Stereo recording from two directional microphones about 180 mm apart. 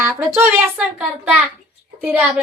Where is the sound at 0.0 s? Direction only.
15° right (ahead or behind).